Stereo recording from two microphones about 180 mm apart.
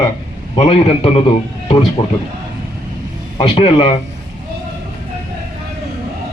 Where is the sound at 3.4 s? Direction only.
30° left (ahead or behind).